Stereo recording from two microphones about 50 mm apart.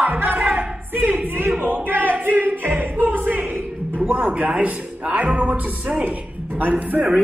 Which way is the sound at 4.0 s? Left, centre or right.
Right.